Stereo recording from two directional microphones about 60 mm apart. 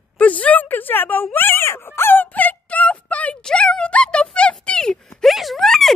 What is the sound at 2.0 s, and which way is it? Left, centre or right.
Fowl, left.